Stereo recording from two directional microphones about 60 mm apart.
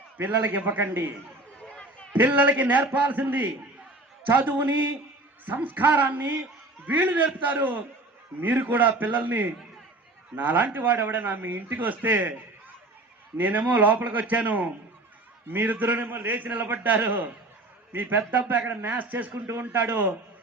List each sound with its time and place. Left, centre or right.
0.2 s a man's voice: right
1.6 s a sound: centre
2.1 s a man's voice: right
13.3 s a man's voice: right
19.3 s speech: right
19.6 s a man's voice: right